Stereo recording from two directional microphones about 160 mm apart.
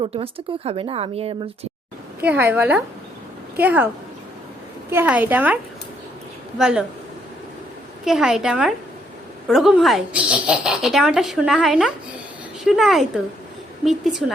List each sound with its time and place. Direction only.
0.0 s a woman's voice: 35° right (ahead or behind)
2.2 s a woman's voice: 10° right (ahead or behind)
4.9 s a woman's voice: 10° right (ahead or behind)
6.6 s speech: 5° right (ahead or behind)
8.0 s speech: 5° right (ahead or behind)